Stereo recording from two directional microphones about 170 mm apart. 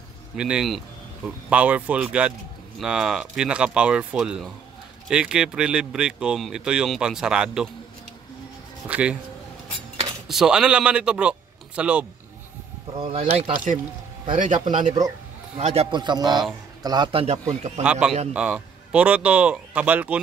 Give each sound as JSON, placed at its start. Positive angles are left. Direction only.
{"t": 0.4, "sound": "speech", "side_deg": -5}
{"t": 8.8, "sound": "speech", "side_deg": -10}
{"t": 10.2, "sound": "a man's voice", "side_deg": -5}
{"t": 12.9, "sound": "a man's voice", "side_deg": -30}
{"t": 14.3, "sound": "speech", "side_deg": -50}
{"t": 15.0, "sound": "a sound", "side_deg": -25}
{"t": 15.6, "sound": "a man's voice", "side_deg": -35}
{"t": 18.3, "sound": "speech", "side_deg": -5}